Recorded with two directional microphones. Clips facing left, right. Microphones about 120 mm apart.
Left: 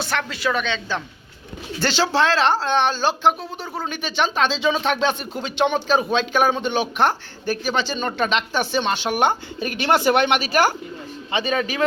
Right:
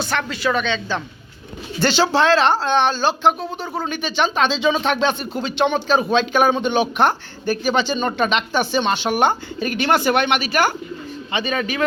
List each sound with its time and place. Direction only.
0.0 s speech: 5° left (ahead or behind)
9.2 s speech: 20° left (ahead or behind)